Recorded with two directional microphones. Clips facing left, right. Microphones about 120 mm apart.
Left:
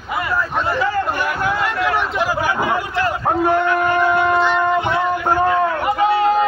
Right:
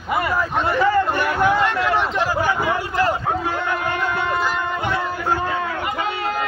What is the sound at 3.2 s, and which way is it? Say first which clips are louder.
Speech: left 7 dB; 55° left (ahead or behind).